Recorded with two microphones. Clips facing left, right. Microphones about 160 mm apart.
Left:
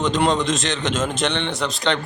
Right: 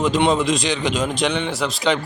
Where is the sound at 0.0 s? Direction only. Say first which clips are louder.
Right 2 dB; centre (ahead or behind).